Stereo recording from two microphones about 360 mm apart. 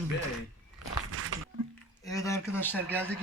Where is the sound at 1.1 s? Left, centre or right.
Right.